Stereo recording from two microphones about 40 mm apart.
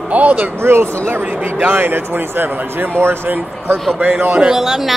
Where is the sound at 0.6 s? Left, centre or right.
Right.